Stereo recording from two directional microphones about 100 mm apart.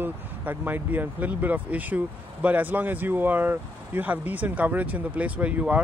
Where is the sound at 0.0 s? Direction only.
20° right (ahead or behind).